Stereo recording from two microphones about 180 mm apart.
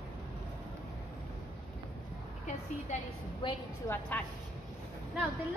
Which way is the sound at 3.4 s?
30° left (ahead or behind).